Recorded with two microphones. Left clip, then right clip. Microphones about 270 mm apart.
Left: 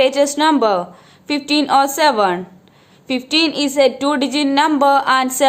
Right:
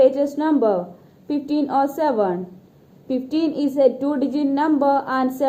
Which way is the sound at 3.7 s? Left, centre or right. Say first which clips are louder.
Left 3 dB; left.